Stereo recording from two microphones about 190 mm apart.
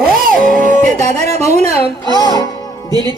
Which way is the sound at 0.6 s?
40° right (ahead or behind).